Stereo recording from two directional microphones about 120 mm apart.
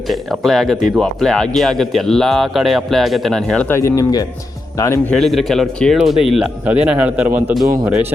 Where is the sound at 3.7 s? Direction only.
25° left (ahead or behind).